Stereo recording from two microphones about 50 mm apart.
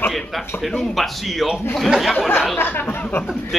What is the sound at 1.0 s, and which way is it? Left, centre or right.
Speech, centre.